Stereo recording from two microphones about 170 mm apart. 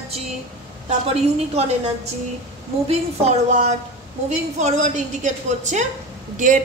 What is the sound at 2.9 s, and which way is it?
A woman's voice, 40° right (ahead or behind).